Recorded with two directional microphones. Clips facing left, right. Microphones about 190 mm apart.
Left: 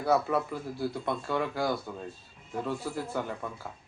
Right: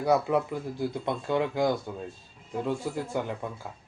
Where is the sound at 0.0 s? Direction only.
15° right (ahead or behind).